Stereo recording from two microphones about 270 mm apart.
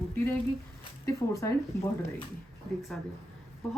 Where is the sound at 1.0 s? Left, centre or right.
Centre.